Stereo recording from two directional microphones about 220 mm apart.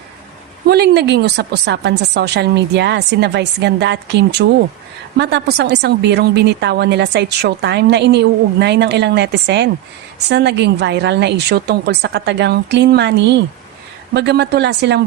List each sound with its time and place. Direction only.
0.7 s a woman's voice: 50° right (ahead or behind)